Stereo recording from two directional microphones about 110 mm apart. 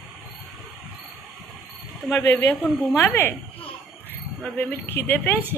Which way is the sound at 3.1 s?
20° left (ahead or behind).